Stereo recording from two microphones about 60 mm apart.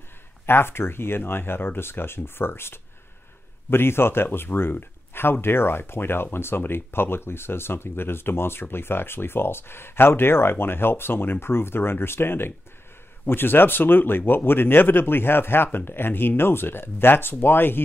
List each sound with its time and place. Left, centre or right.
0.5 s speech: left